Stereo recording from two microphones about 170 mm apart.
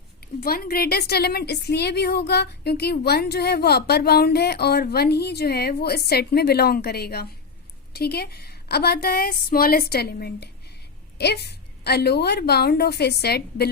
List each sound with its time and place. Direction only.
0.3 s a woman's voice: 60° left (ahead or behind)